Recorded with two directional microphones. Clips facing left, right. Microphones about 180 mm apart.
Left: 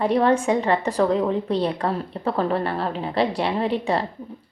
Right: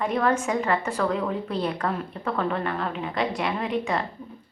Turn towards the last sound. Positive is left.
turn(degrees=30)  # may be behind; listen again after turning